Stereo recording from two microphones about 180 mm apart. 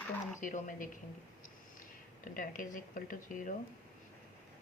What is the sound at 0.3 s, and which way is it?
Speech, 45° left (ahead or behind).